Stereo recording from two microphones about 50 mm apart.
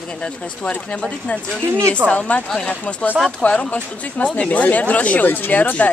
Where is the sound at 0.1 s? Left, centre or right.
Centre.